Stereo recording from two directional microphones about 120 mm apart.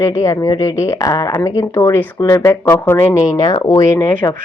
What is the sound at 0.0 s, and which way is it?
Speech, 25° left (ahead or behind).